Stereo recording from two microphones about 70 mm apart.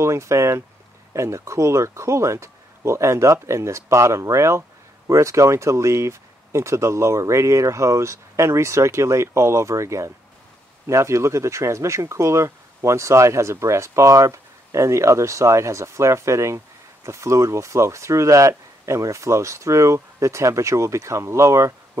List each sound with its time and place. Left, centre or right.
0.0 s speech: right